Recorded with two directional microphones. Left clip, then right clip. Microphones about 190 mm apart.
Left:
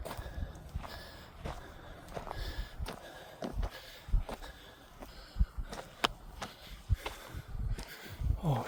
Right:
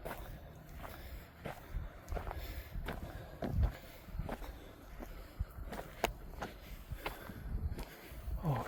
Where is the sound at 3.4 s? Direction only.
Centre (ahead or behind).